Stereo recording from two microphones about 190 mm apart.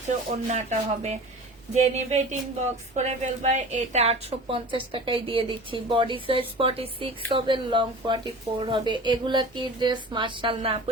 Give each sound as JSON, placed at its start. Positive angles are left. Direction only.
{"t": 0.3, "sound": "a woman's voice", "side_deg": -35}